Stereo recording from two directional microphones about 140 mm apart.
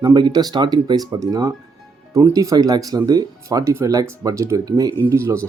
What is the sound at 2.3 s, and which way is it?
Speech, 25° right (ahead or behind).